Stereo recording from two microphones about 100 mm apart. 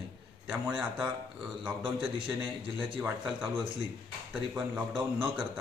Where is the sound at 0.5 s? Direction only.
20° right (ahead or behind).